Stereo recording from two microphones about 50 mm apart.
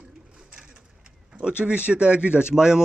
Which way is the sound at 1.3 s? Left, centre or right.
Centre.